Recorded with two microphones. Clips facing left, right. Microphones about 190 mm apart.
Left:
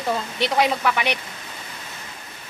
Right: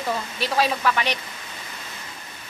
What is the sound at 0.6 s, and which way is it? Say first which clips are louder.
Speech: even; 15° left (ahead or behind).